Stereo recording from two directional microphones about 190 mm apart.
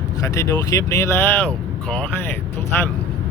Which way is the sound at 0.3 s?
15° left (ahead or behind).